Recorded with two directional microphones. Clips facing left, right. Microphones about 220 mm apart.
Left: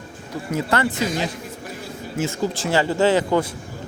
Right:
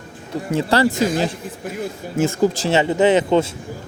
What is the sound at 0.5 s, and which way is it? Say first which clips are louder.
A man's voice: right 5 dB; 35° right (ahead or behind).